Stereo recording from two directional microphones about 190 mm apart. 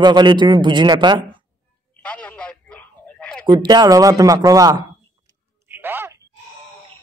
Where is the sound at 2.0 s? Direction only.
5° left (ahead or behind).